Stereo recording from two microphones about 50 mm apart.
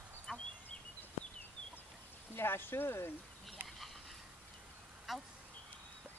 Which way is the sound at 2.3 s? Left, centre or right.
Left.